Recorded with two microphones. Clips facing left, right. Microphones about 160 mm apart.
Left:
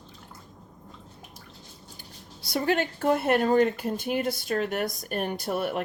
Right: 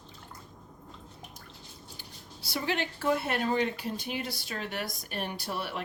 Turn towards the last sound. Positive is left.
turn(degrees=50)  # may be behind; listen again after turning